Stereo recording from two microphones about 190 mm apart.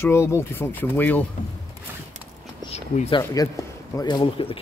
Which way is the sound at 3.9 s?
25° left (ahead or behind).